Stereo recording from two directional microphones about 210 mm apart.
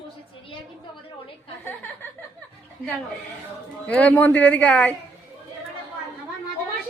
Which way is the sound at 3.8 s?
5° left (ahead or behind).